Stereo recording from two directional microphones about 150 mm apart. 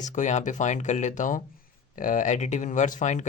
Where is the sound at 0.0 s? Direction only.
55° left (ahead or behind).